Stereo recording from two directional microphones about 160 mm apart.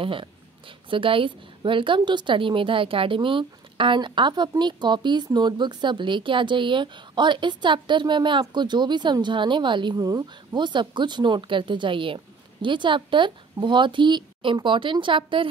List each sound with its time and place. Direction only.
0.0 s a woman's voice: 35° right (ahead or behind)